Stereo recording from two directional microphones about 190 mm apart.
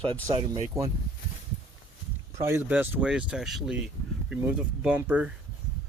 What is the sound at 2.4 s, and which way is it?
Speech, 10° right (ahead or behind).